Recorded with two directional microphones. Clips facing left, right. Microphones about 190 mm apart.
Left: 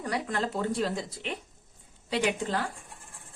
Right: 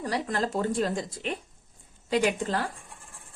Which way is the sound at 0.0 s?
35° right (ahead or behind).